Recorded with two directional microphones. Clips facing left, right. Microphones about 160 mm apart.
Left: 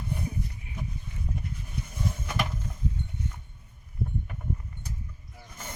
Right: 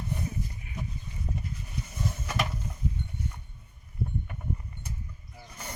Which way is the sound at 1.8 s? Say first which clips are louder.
Left 1 dB; 5° right (ahead or behind).